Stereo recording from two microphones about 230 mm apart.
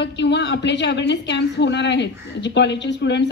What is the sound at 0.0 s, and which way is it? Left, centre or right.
A woman's voice, left.